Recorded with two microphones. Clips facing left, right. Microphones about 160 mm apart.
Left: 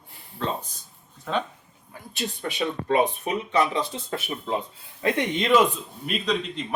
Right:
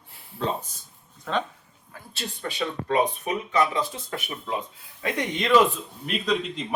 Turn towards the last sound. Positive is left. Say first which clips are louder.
# right 1 dB
turn(degrees=-5)  # may be behind; listen again after turning